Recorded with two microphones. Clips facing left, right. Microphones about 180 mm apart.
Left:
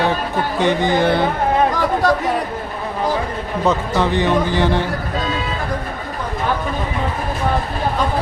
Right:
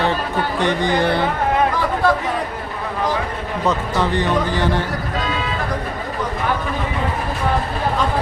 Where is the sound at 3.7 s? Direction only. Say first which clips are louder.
Left 2 dB; 20° left (ahead or behind).